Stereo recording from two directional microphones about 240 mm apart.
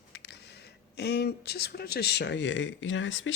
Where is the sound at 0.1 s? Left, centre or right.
Left.